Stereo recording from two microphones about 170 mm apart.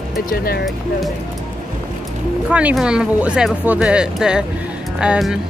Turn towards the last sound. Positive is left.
turn(degrees=-5)  # may be behind; listen again after turning